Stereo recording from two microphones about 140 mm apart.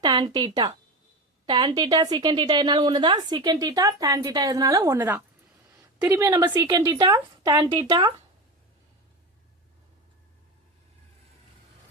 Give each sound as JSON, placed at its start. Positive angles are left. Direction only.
{"t": 0.0, "sound": "a woman's voice", "side_deg": -30}